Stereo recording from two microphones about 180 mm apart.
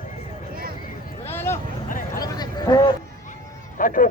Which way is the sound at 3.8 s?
50° left (ahead or behind).